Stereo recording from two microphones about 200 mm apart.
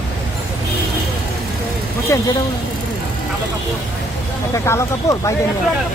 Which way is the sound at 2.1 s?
15° left (ahead or behind).